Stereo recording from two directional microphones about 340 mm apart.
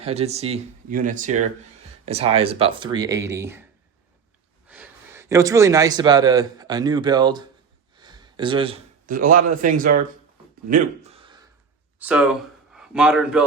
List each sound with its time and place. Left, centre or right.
0.0 s speech: centre
4.7 s a man's voice: centre; by 10.0 s right
10.7 s a sound: right
11.9 s speech: centre